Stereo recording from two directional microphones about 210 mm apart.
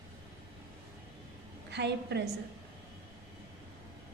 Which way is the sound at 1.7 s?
55° right (ahead or behind).